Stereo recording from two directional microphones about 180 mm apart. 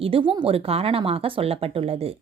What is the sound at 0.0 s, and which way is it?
Speech, 30° right (ahead or behind).